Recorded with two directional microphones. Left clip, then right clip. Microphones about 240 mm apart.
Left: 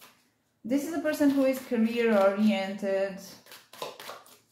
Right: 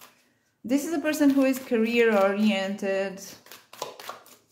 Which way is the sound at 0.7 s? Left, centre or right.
Right.